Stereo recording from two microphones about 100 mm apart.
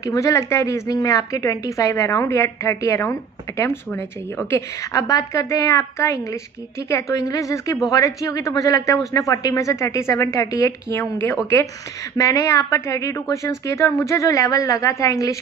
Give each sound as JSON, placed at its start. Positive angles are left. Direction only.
{"t": 0.0, "sound": "a woman's voice", "side_deg": 35}